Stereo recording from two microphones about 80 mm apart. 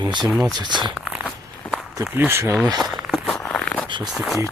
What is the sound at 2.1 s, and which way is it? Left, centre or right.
Speech, right.